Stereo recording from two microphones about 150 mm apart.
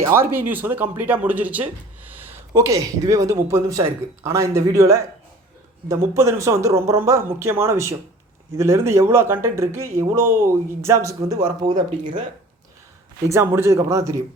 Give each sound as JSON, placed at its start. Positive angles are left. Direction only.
{"t": 0.0, "sound": "speech", "side_deg": -15}
{"t": 13.2, "sound": "speech", "side_deg": -15}